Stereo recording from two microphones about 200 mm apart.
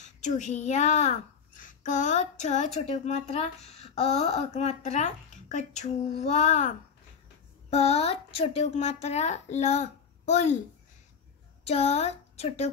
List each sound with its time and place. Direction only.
0.0 s a child's voice: 35° left (ahead or behind)
7.7 s a child's voice: 30° left (ahead or behind)
11.6 s speech: 35° left (ahead or behind)